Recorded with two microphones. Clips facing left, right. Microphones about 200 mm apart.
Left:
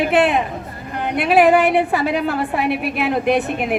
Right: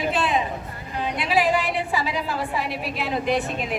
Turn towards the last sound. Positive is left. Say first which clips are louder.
# left 6 dB
turn(degrees=60)  # may be behind; listen again after turning